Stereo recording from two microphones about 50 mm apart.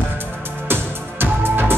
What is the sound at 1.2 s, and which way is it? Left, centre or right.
Music, right.